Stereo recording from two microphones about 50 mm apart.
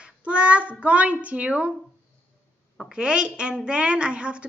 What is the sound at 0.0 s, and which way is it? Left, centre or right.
A child's voice, right.